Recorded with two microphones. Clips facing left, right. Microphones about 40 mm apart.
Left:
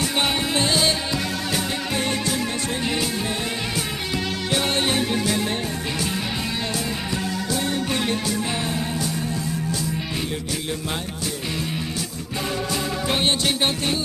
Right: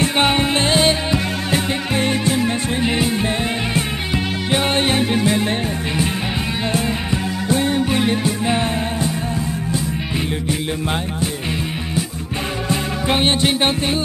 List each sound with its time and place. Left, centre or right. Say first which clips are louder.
0.0 s music: right 6 dB; right
6.7 s music: right 6 dB; right
7.9 s music: right 5 dB; right
10.7 s music: right 6 dB; right
13.1 s music: right 6 dB; right